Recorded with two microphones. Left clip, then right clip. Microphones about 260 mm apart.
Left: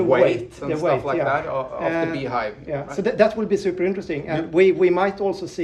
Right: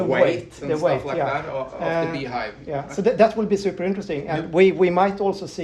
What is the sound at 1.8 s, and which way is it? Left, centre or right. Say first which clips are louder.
Speech: right 1 dB; centre.